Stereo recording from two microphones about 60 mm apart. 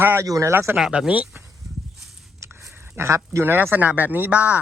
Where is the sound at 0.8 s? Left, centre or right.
Centre.